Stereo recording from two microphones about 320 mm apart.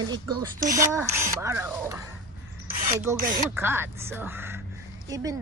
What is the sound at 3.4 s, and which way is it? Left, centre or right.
Speech, centre.